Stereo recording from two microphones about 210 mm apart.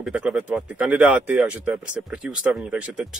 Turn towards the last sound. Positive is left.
turn(degrees=-5)  # may be behind; listen again after turning